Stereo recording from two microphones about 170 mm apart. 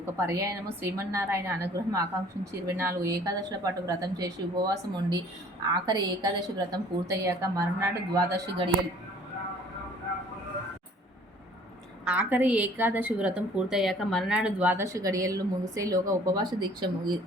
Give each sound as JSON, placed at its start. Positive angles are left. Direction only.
{"t": 0.0, "sound": "a woman's voice", "side_deg": -20}
{"t": 12.0, "sound": "a woman's voice", "side_deg": -5}